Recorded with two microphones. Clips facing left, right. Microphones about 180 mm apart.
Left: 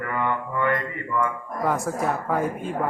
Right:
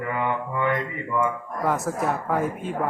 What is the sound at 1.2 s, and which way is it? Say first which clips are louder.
Speech: even; centre (ahead or behind).